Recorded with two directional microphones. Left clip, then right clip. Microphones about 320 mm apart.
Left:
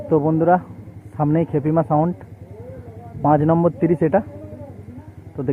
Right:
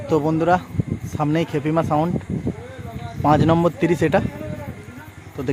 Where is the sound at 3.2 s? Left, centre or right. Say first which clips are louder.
Even; centre.